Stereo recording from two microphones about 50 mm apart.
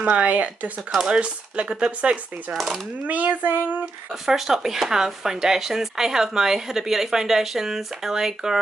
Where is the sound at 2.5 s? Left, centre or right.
Centre.